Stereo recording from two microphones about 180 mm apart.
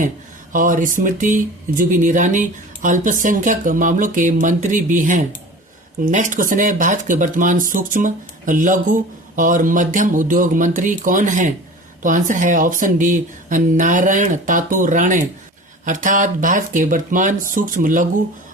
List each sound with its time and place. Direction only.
0.5 s speech: 45° right (ahead or behind)